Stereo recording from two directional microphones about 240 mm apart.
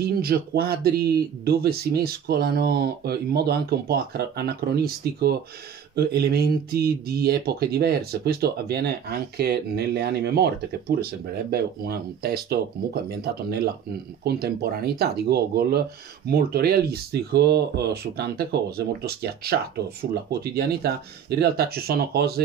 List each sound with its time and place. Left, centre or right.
0.0 s speech: right